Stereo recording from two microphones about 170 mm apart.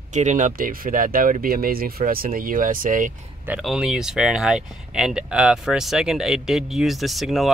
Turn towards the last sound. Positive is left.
turn(degrees=0)  # may be behind; listen again after turning